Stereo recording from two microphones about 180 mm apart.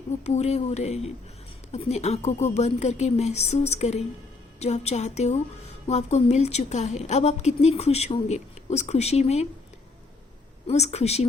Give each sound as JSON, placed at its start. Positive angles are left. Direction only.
{"t": 0.3, "sound": "a woman's voice", "side_deg": 35}
{"t": 10.7, "sound": "a woman's voice", "side_deg": 35}